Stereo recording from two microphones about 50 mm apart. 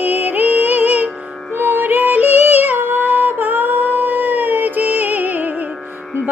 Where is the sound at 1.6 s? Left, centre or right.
Right.